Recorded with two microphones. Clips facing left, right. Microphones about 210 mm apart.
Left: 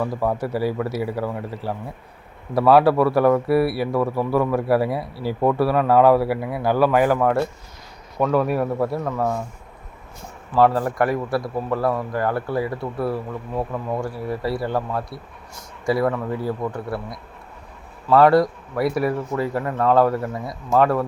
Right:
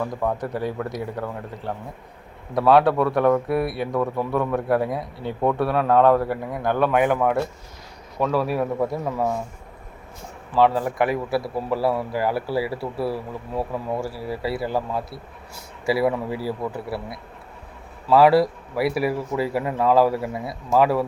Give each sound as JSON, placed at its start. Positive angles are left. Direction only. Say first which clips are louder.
{"t": 0.0, "sound": "a man's voice", "louder": "left 2 dB", "side_deg": 5}
{"t": 10.5, "sound": "a man's voice", "louder": "left 1 dB", "side_deg": 0}